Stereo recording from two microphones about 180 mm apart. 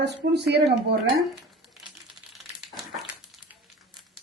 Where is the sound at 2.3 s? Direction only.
Centre (ahead or behind).